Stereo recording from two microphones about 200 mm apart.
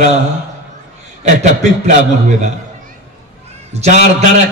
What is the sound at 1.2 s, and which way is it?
Speech, 35° right (ahead or behind).